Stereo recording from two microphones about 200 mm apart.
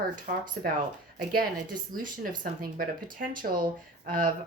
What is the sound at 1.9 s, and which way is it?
A woman's voice, 45° right (ahead or behind).